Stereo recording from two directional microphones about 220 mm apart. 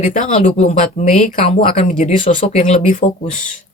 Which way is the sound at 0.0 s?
35° left (ahead or behind).